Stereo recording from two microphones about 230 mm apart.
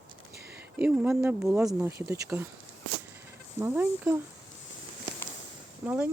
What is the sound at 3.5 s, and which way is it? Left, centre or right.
Speech, centre.